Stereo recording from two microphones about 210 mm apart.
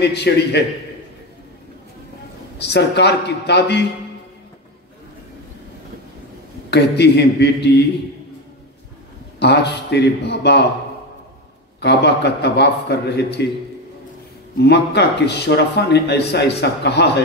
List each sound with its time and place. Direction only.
0.0 s speech: 55° left (ahead or behind)
2.6 s speech: 50° left (ahead or behind)
6.7 s speech: 55° left (ahead or behind)
9.4 s speech: 50° left (ahead or behind)
11.8 s speech: 55° left (ahead or behind)
14.6 s speech: 50° left (ahead or behind)